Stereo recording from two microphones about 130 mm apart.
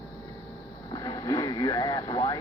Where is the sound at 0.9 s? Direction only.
30° left (ahead or behind).